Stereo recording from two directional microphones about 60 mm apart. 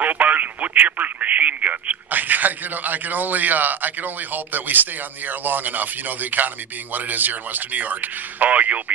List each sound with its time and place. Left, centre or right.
0.0 s speech: right